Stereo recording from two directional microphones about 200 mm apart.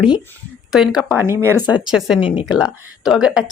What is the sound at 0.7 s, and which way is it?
Speech, centre (ahead or behind).